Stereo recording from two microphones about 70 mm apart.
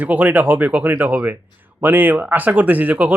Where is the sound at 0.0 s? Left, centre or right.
Right.